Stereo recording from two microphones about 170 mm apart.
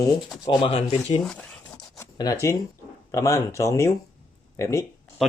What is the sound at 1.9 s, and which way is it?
Zipper, 20° left (ahead or behind).